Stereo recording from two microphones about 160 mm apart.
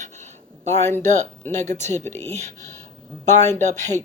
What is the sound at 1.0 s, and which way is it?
Speech, 45° right (ahead or behind).